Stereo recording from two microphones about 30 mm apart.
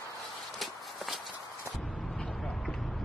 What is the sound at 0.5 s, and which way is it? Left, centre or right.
Walk, centre.